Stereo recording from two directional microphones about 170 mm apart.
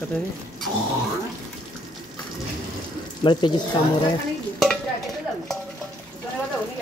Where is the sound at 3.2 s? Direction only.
25° left (ahead or behind).